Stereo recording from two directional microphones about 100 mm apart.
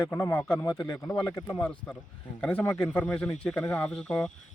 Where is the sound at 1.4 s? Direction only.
15° left (ahead or behind).